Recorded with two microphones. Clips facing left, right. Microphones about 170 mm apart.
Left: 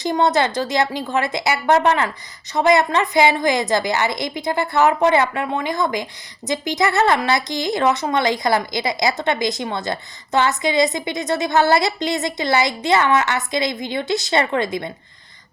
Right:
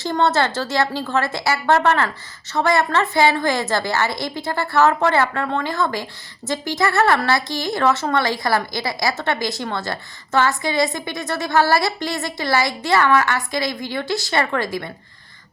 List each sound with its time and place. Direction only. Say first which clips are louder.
0.0 s a woman's voice: left 1 dB; 15° left (ahead or behind)